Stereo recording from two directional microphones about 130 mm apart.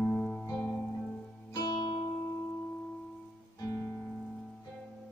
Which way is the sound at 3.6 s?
25° left (ahead or behind).